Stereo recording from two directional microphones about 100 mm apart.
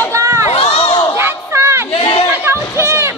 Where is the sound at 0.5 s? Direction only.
85° left.